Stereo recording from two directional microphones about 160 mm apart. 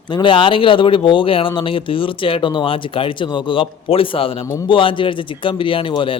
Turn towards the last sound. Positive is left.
turn(degrees=30)  # may be behind; listen again after turning